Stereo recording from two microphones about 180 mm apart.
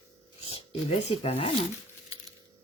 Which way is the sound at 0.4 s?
35° left (ahead or behind).